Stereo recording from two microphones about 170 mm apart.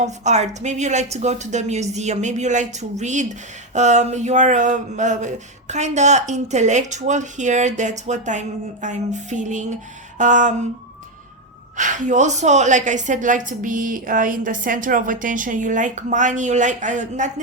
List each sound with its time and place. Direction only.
0.0 s speech: 45° right (ahead or behind)
11.8 s speech: 50° right (ahead or behind)